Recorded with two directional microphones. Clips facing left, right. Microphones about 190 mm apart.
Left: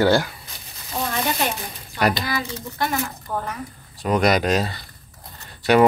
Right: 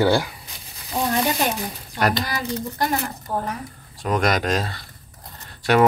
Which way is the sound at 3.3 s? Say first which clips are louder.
Right 2 dB; 35° right (ahead or behind).